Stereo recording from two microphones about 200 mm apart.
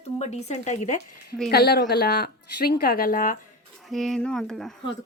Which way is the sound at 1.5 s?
50° left (ahead or behind).